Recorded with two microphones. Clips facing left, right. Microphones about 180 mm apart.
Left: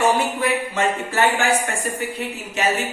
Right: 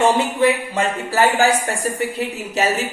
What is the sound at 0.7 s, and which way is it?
A woman's voice, 35° right (ahead or behind).